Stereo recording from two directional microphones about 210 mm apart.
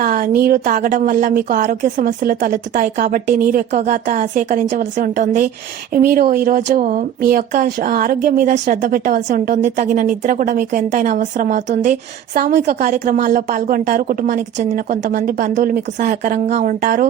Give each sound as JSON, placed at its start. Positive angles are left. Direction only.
{"t": 0.0, "sound": "a woman's voice", "side_deg": -40}